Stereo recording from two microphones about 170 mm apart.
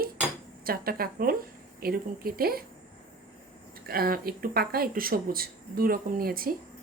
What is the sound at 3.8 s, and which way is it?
Speech, 60° right (ahead or behind).